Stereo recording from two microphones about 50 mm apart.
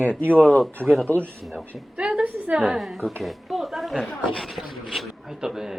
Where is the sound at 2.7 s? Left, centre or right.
Centre.